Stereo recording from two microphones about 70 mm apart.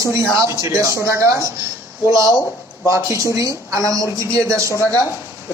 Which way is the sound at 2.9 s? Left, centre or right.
Right.